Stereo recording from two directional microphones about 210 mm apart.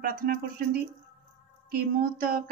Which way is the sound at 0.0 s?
40° right (ahead or behind).